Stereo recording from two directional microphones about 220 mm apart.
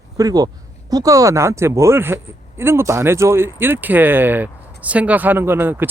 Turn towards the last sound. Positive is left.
turn(degrees=-10)  # may be behind; listen again after turning